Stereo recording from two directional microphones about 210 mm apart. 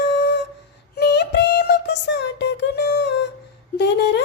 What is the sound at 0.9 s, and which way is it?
Child singing, 50° left (ahead or behind).